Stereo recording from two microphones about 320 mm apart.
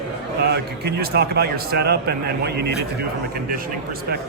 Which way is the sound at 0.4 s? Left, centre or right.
Right.